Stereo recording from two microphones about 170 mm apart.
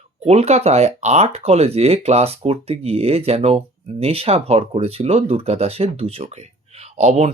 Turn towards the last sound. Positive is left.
turn(degrees=-40)  # may be behind; listen again after turning